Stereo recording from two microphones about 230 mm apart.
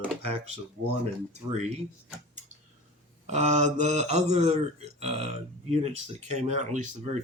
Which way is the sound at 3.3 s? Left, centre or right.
Right.